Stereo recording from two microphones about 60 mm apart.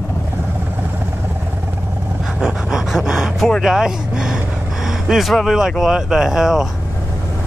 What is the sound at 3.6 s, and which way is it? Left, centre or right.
Speech, centre.